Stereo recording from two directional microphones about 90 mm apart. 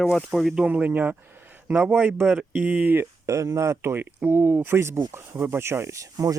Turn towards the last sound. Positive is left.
turn(degrees=-35)  # may be behind; listen again after turning